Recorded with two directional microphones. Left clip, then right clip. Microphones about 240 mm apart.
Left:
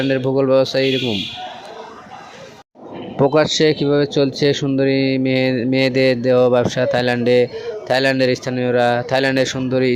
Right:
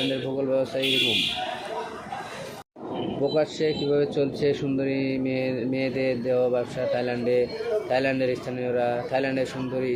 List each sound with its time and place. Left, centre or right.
0.1 s speech: left
3.3 s speech: left